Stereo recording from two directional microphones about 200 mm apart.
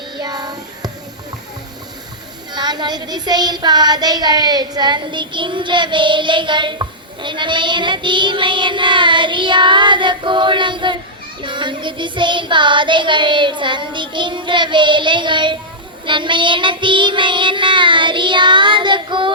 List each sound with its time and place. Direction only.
0.2 s child singing: 20° right (ahead or behind)
2.5 s child singing: 20° right (ahead or behind)